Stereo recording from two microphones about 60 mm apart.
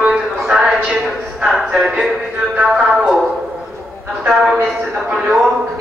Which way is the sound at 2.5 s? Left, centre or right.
Centre.